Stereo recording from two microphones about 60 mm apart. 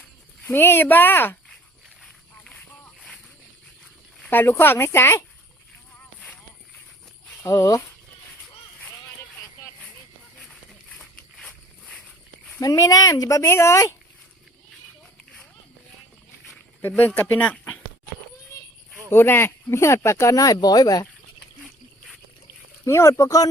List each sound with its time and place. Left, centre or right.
0.4 s speech: left
2.6 s a sound: centre
4.3 s speech: left
7.4 s speech: left
10.4 s a sound: centre
12.6 s speech: left
17.2 s speech: left
19.1 s speech: left
20.3 s speech: left
22.9 s speech: left